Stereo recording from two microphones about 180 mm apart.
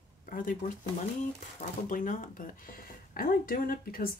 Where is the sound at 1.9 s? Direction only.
45° left (ahead or behind).